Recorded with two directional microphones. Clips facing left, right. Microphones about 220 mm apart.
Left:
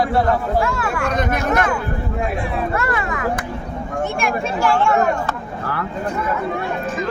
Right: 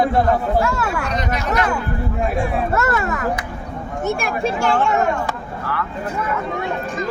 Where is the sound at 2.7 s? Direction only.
45° right (ahead or behind).